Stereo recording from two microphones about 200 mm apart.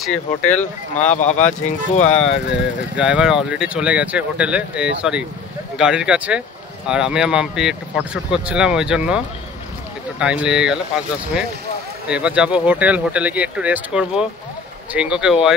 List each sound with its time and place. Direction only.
0.1 s speech: 35° left (ahead or behind)
3.0 s speech: 5° right (ahead or behind)